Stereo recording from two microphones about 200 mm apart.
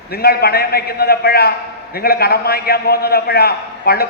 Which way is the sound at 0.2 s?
50° left (ahead or behind).